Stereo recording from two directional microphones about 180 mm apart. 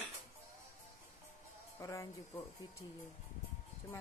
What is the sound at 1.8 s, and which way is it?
Speech, 20° left (ahead or behind).